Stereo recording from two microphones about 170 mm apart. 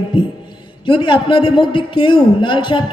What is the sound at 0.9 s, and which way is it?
A man's voice, 30° left (ahead or behind).